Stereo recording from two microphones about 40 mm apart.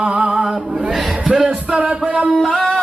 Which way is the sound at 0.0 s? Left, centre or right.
Centre.